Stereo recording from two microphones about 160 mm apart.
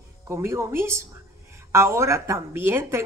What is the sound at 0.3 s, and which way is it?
Speech, 15° right (ahead or behind).